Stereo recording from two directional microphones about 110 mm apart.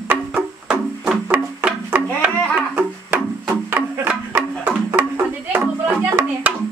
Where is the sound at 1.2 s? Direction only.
15° right (ahead or behind).